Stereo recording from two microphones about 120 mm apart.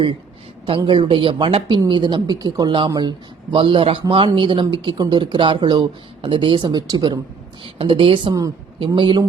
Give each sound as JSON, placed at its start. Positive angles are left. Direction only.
{"t": 0.8, "sound": "a man's voice", "side_deg": -40}
{"t": 8.3, "sound": "a woman's voice", "side_deg": -30}